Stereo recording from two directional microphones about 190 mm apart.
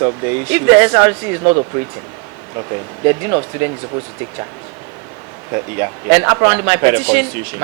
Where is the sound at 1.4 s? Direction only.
30° right (ahead or behind).